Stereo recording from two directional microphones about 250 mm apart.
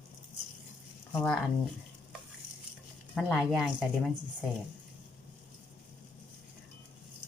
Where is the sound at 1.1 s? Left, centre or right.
Centre.